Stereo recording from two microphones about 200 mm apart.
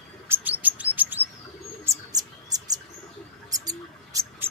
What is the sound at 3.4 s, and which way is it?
Rodents, 20° right (ahead or behind).